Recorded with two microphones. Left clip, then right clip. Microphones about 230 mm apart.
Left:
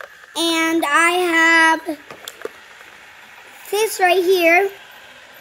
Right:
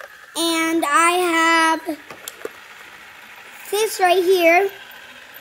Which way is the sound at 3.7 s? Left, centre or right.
Centre.